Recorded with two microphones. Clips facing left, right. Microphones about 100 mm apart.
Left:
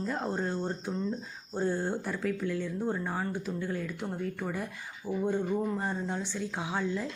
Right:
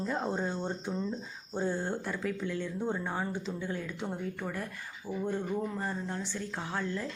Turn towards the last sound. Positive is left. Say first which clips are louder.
# left 3 dB
turn(degrees=10)  # may be behind; listen again after turning